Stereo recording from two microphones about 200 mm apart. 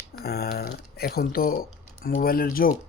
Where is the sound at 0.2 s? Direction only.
50° left (ahead or behind).